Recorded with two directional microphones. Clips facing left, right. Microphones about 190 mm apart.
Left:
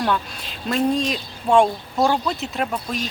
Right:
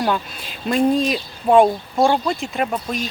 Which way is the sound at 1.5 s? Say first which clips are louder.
Right 3 dB; 20° right (ahead or behind).